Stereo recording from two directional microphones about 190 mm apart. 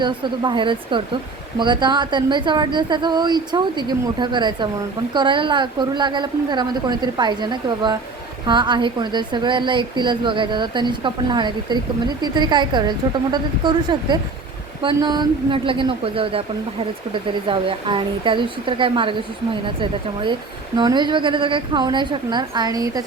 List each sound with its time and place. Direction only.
0.0 s a woman's voice: 25° right (ahead or behind)
17.5 s a woman's voice: 25° right (ahead or behind)